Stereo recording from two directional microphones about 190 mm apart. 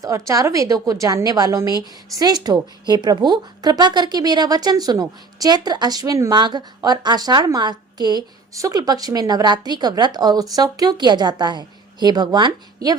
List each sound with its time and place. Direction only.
0.0 s a woman's voice: 15° right (ahead or behind)